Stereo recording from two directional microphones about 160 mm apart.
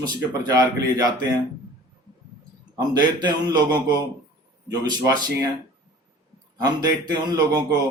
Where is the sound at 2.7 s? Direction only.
25° right (ahead or behind).